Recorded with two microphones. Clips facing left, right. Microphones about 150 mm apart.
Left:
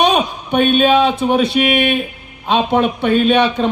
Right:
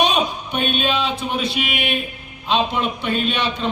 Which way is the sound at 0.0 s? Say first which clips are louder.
Left 4 dB; 55° left (ahead or behind).